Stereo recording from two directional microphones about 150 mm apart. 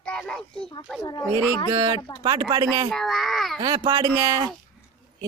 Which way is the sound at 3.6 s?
35° right (ahead or behind).